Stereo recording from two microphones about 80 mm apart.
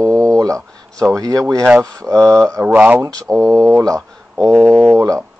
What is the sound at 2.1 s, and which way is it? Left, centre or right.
Speech, right.